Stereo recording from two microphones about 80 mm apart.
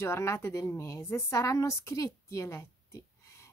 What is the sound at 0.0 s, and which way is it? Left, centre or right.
A woman's voice, left.